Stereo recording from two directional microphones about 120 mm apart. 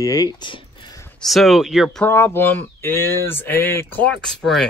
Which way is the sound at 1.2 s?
Centre (ahead or behind).